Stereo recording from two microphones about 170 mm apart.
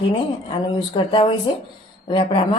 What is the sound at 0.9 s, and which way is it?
Speech, 30° left (ahead or behind).